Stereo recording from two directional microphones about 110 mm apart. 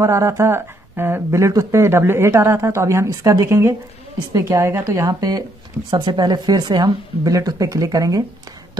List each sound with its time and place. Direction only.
0.0 s speech: 25° right (ahead or behind)
5.9 s speech: 45° right (ahead or behind)